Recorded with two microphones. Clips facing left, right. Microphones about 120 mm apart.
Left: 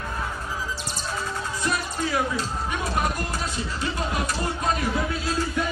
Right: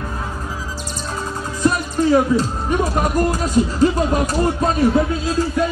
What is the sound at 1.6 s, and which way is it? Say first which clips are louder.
Speech: right 11 dB; 40° right (ahead or behind).